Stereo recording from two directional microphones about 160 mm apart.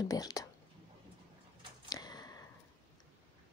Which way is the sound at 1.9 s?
25° left (ahead or behind).